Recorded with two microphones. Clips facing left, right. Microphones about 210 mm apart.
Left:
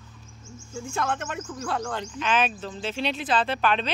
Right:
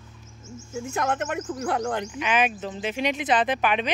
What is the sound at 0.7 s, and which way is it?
Speech, 20° right (ahead or behind).